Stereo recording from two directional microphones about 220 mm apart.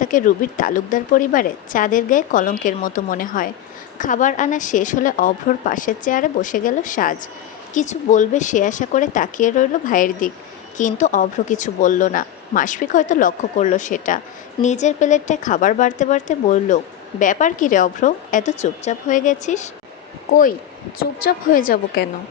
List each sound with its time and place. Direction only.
0.0 s speech: 35° left (ahead or behind)